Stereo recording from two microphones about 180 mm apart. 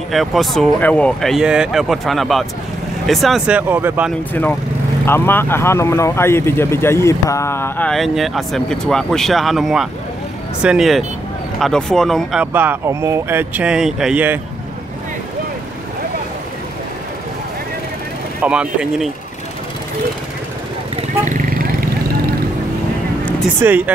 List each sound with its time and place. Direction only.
0.1 s speech: centre (ahead or behind)
4.3 s speech: 10° left (ahead or behind); by 14.4 s 10° right (ahead or behind)
18.4 s speech: 5° right (ahead or behind)
21.3 s vehicle: 50° right (ahead or behind)
23.6 s speech: 15° right (ahead or behind)